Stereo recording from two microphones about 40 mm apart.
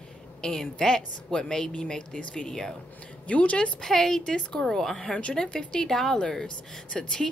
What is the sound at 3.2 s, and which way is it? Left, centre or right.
Speech, left.